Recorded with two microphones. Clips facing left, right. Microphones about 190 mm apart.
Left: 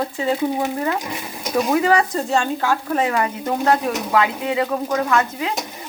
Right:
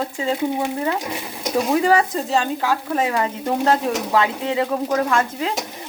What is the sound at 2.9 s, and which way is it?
Speech, 25° right (ahead or behind).